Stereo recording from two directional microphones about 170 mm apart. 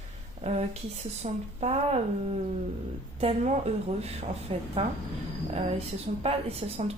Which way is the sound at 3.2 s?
40° right (ahead or behind).